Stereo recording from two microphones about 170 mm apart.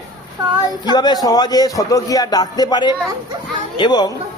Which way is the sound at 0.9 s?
25° left (ahead or behind).